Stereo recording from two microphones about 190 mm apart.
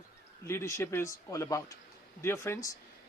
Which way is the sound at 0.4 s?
15° left (ahead or behind).